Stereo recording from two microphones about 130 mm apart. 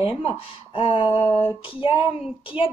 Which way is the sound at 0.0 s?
40° left (ahead or behind).